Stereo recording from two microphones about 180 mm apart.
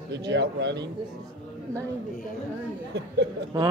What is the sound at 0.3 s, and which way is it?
Speech, 75° right (ahead or behind).